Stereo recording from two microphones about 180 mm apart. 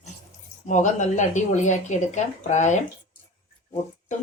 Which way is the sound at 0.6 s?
45° left (ahead or behind).